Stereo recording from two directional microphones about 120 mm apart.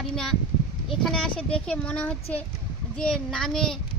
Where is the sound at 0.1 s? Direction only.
5° left (ahead or behind).